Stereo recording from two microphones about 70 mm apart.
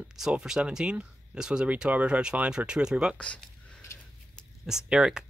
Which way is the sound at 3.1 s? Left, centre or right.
Centre.